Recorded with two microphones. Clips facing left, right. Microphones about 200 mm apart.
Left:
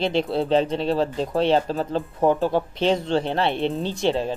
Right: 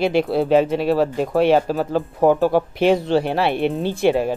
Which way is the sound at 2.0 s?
50° right (ahead or behind).